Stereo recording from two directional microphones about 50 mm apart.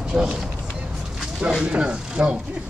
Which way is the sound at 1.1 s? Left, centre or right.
Centre.